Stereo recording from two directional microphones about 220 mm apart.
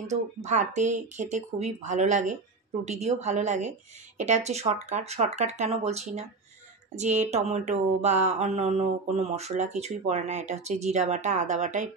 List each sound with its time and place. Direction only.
0.0 s mantra: 30° right (ahead or behind)
4.2 s speech: 30° right (ahead or behind)
7.0 s mantra: 30° right (ahead or behind)